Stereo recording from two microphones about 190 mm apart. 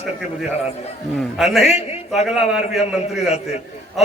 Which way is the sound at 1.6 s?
35° left (ahead or behind).